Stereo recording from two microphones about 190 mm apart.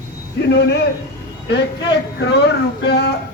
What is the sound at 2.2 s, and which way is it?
Speech, 65° left (ahead or behind).